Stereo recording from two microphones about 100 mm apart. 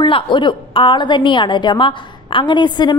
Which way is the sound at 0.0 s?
55° left (ahead or behind).